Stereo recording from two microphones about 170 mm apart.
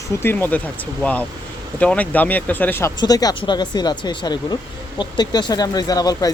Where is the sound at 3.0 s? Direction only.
20° left (ahead or behind).